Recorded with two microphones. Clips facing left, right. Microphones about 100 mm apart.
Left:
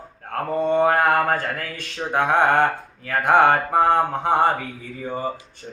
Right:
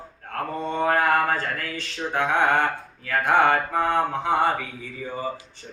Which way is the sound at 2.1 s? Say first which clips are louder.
Left 3 dB; 50° left (ahead or behind).